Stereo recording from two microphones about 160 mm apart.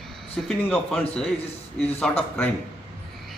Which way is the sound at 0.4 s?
5° left (ahead or behind).